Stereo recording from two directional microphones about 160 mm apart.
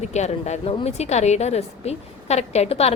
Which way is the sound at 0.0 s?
45° left (ahead or behind).